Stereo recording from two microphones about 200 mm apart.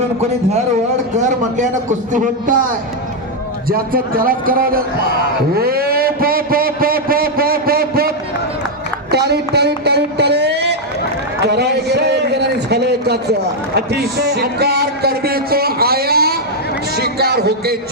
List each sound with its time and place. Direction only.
1.1 s a man's voice: 35° right (ahead or behind)
3.7 s a man's voice: 45° right (ahead or behind)
5.5 s a sound: 50° right (ahead or behind)
9.1 s speech: 55° right (ahead or behind)
11.4 s a sound: 55° right (ahead or behind)
13.7 s a man's voice: 55° right (ahead or behind)